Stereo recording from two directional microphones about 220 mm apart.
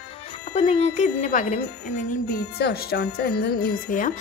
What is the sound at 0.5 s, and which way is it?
Speech, 30° left (ahead or behind).